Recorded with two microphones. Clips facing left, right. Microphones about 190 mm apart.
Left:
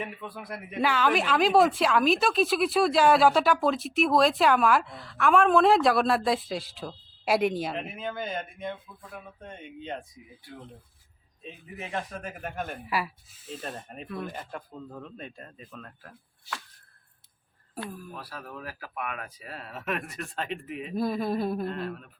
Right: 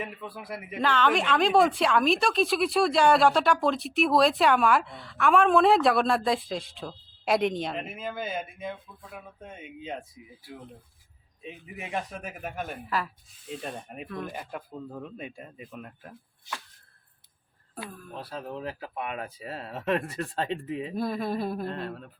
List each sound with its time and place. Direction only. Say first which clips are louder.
0.0 s a woman's voice: even; centre (ahead or behind)
0.8 s a woman's voice: even; 10° left (ahead or behind)
11.4 s speech: even; 10° right (ahead or behind)
12.9 s a woman's voice: even; 10° left (ahead or behind); by 16.6 s 20° right (ahead or behind)
17.8 s speech: left 4 dB; 10° left (ahead or behind)
18.1 s speech: right 4 dB; 25° right (ahead or behind)
20.9 s a woman's voice: left 3 dB; centre (ahead or behind)
21.8 s speech: left 1 dB; 30° right (ahead or behind)